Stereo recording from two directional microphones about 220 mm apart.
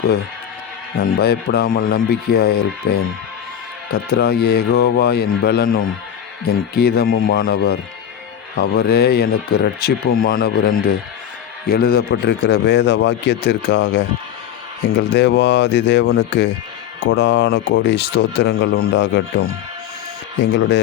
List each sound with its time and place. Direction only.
1.1 s speech: 45° left (ahead or behind)